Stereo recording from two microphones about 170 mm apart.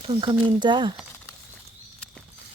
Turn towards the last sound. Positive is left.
turn(degrees=-25)  # may be behind; listen again after turning